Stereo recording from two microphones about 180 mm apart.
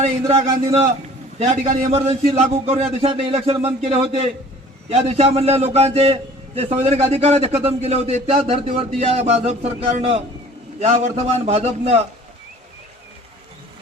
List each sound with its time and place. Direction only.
0.0 s a man's voice: 35° right (ahead or behind)